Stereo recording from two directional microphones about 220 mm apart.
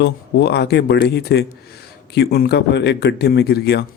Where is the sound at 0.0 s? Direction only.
50° left (ahead or behind).